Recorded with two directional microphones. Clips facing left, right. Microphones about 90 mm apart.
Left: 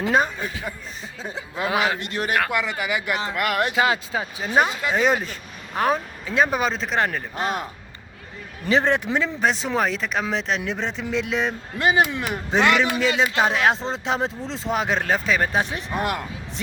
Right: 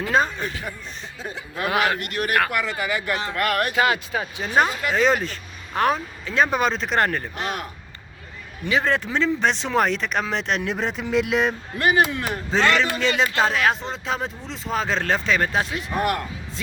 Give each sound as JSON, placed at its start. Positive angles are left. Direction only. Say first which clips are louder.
{"t": 0.0, "sound": "a man's voice", "louder": "even", "side_deg": 15}
{"t": 7.3, "sound": "a man's voice", "louder": "left 3 dB", "side_deg": 25}
{"t": 9.1, "sound": "speech", "louder": "right 1 dB", "side_deg": 10}
{"t": 11.8, "sound": "a man's voice", "louder": "even", "side_deg": 20}